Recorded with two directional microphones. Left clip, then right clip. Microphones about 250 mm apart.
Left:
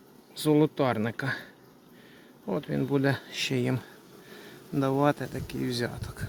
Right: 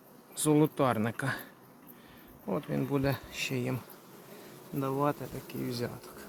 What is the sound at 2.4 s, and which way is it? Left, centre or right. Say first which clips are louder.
Speech: left 3 dB; centre.